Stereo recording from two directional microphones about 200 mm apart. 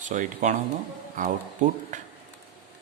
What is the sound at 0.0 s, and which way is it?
Speech, 40° right (ahead or behind).